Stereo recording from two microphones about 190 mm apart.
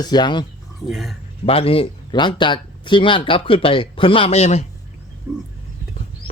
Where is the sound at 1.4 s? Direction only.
30° left (ahead or behind).